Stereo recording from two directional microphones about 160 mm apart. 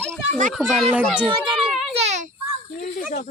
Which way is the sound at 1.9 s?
40° right (ahead or behind).